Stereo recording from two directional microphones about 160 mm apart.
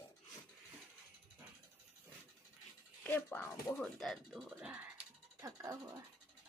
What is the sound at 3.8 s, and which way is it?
Speech, centre (ahead or behind).